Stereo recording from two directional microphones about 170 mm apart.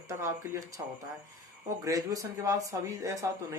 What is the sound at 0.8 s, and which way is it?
Speech, 20° right (ahead or behind).